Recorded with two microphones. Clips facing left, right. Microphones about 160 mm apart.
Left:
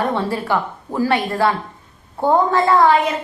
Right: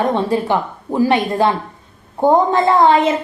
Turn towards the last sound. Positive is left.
turn(degrees=-20)  # may be behind; listen again after turning